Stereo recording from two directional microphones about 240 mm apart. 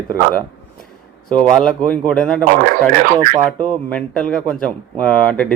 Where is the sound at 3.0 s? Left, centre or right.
Right.